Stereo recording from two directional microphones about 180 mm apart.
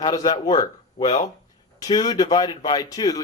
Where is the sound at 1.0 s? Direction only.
35° left (ahead or behind).